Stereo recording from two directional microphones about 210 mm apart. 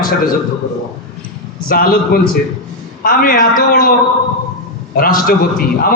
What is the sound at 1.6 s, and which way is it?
Speech, 45° left (ahead or behind).